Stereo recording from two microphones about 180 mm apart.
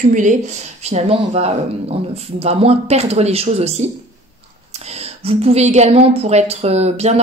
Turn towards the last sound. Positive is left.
turn(degrees=-35)  # may be behind; listen again after turning